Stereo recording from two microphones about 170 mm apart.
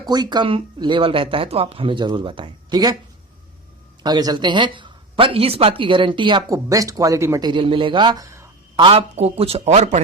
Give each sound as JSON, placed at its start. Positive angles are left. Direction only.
{"t": 0.1, "sound": "speech", "side_deg": -25}
{"t": 4.0, "sound": "speech", "side_deg": -25}
{"t": 8.7, "sound": "a man's voice", "side_deg": -30}